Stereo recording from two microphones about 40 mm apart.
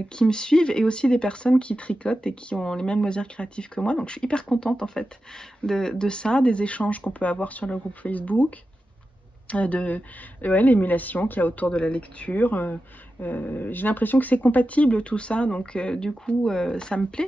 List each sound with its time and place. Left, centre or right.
0.1 s speech: centre; by 11.7 s left
11.7 s speech: left